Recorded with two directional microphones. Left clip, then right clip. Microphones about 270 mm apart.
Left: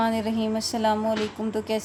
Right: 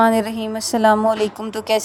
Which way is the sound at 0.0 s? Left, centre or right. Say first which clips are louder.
Right 9 dB; right.